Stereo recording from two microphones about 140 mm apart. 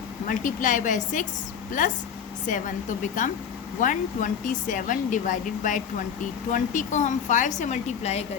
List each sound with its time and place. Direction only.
0.3 s speech: 65° left (ahead or behind)